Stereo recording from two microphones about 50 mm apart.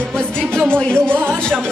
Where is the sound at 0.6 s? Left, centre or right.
Centre.